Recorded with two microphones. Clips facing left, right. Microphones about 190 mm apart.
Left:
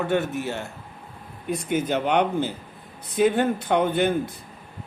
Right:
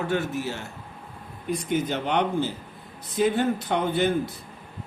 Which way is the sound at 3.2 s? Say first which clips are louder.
Left 2 dB; 60° left (ahead or behind).